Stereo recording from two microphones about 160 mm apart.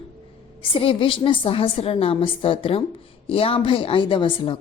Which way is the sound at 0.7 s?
35° left (ahead or behind).